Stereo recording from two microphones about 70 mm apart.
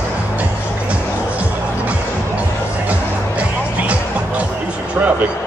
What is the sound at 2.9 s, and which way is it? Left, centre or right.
Music, right.